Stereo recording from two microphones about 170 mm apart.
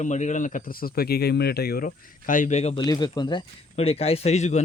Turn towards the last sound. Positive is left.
turn(degrees=40)  # may be behind; listen again after turning